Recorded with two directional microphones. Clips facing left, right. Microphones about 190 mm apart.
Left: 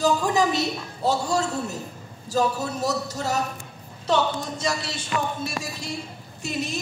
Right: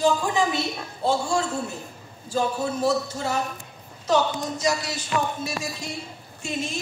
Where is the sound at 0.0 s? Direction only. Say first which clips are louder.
Left 1 dB; 40° left (ahead or behind).